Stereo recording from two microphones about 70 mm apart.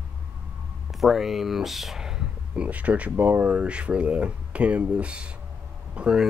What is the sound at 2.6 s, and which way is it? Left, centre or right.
Speech, right.